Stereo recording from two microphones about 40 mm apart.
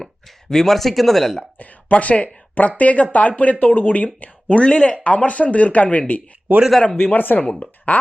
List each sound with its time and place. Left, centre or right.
0.0 s speech: centre
1.5 s speech: left
5.0 s speech: left
6.9 s speech: left
7.9 s speech: left